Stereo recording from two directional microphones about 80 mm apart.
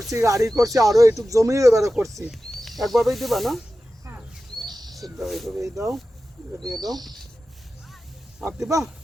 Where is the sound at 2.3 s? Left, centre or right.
Centre.